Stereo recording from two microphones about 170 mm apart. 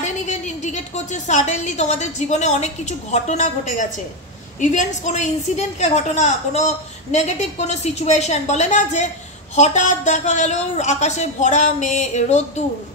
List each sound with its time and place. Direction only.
0.0 s a woman's voice: 45° left (ahead or behind)